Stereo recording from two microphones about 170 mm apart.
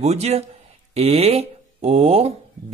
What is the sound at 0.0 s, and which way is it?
Speech, 40° right (ahead or behind).